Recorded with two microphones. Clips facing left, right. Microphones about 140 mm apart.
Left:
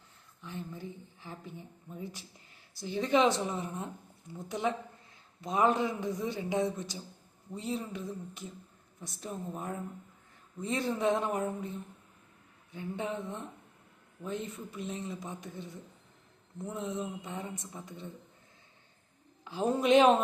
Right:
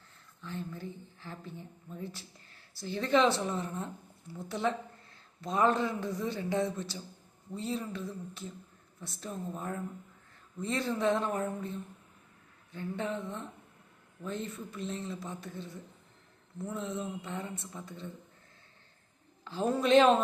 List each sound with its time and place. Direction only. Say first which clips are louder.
0.4 s a woman's voice: right 1 dB; 15° left (ahead or behind)
19.5 s a man's voice: left 1 dB; 15° left (ahead or behind)